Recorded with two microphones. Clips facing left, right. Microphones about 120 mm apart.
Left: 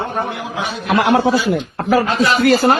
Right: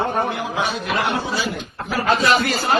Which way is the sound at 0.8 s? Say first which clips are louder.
Left 8 dB; 85° left.